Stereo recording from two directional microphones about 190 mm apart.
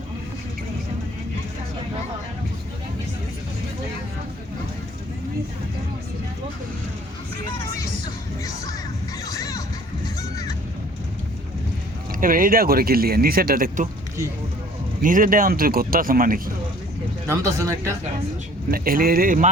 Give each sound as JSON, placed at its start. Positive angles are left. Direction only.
{"t": 9.2, "sound": "a sound", "side_deg": 20}
{"t": 12.2, "sound": "speech", "side_deg": -50}
{"t": 15.0, "sound": "speech", "side_deg": -45}
{"t": 17.2, "sound": "speech", "side_deg": -15}
{"t": 18.7, "sound": "speech", "side_deg": -50}